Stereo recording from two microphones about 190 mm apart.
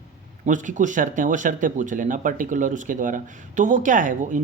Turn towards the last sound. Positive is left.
turn(degrees=-40)  # may be behind; listen again after turning